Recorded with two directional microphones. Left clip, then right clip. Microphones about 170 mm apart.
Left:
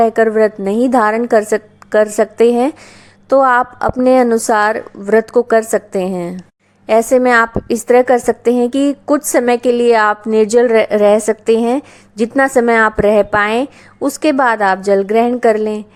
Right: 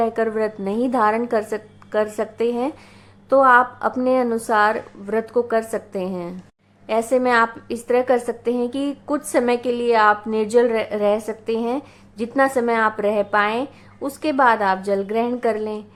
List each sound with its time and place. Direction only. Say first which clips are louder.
0.0 s a woman's voice: left 10 dB; 35° left (ahead or behind)